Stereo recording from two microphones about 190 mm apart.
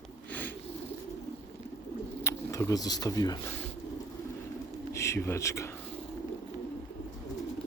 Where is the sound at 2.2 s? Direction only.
15° left (ahead or behind).